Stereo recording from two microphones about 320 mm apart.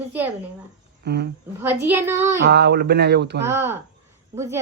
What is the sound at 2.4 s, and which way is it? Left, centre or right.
Speech, right.